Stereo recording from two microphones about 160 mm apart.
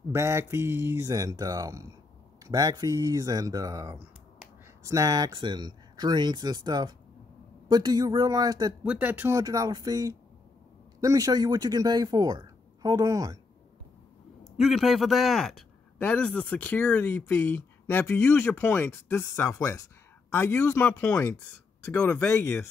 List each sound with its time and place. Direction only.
0.1 s speech: 15° right (ahead or behind)
8.8 s speech: 10° right (ahead or behind)
9.4 s speech: 25° right (ahead or behind)
14.6 s a man's voice: centre (ahead or behind)